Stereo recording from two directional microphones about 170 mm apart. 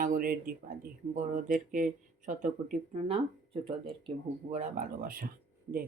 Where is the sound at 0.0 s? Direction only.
55° right (ahead or behind); by 4.1 s 30° right (ahead or behind).